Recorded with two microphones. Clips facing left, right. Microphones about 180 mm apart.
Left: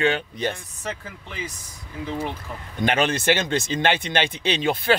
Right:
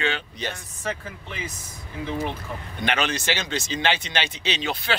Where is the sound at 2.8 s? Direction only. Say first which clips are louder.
Left 4 dB; 45° left (ahead or behind).